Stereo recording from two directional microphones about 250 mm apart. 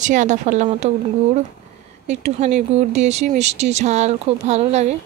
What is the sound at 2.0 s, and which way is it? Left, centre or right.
Speech, right.